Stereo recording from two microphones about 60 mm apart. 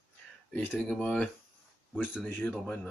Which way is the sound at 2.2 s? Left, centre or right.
Left.